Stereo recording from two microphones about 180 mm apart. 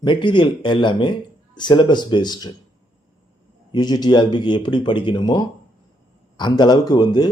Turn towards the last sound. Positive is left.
turn(degrees=25)  # may be behind; listen again after turning